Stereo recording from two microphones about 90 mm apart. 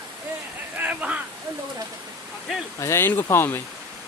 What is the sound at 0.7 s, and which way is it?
Speech, 15° right (ahead or behind).